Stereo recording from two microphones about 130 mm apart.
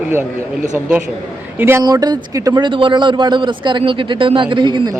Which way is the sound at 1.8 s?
30° right (ahead or behind).